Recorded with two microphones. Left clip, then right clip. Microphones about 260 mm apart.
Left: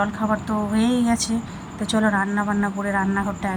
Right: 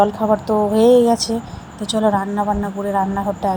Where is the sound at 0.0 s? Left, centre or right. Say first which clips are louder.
Right 8 dB; centre.